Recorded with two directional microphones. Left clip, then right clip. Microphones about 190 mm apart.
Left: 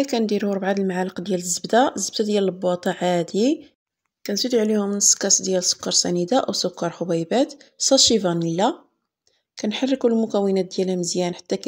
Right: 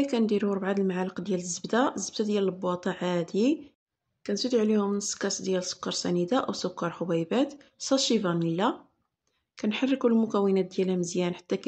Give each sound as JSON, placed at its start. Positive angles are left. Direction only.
{"t": 0.0, "sound": "speech", "side_deg": 20}